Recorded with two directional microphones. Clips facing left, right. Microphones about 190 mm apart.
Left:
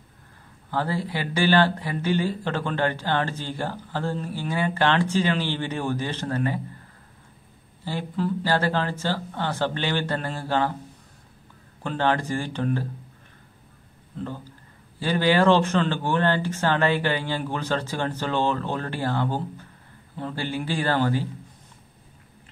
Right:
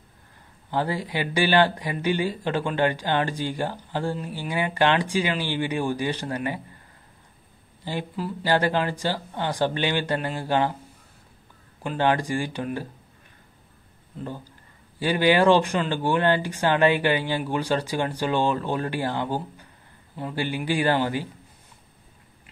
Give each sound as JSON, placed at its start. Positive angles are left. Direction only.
{"t": 0.7, "sound": "speech", "side_deg": -15}
{"t": 7.8, "sound": "speech", "side_deg": -15}
{"t": 11.8, "sound": "speech", "side_deg": -15}
{"t": 15.0, "sound": "speech", "side_deg": -15}